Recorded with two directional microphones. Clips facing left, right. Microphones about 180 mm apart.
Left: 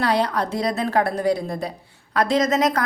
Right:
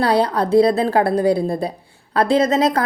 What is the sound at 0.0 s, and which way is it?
A woman's voice, 30° right (ahead or behind).